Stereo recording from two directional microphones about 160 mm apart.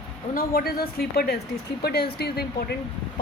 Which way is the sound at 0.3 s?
70° left (ahead or behind).